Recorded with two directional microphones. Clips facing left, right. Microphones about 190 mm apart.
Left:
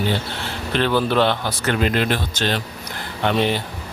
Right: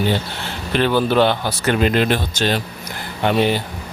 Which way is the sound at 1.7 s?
20° right (ahead or behind).